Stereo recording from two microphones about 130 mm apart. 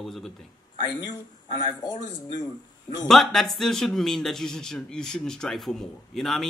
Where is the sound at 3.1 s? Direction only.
Centre (ahead or behind).